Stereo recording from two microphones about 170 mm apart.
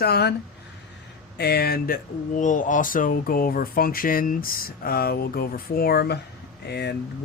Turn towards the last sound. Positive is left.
turn(degrees=75)  # may be behind; listen again after turning